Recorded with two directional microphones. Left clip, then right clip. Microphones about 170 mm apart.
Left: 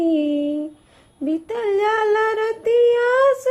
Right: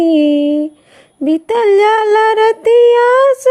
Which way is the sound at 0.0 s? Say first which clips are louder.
Right 9 dB; 45° right (ahead or behind).